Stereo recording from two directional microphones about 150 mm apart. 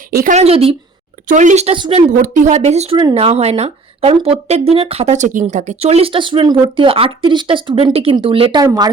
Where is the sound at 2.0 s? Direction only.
60° right (ahead or behind); by 8.6 s 35° right (ahead or behind).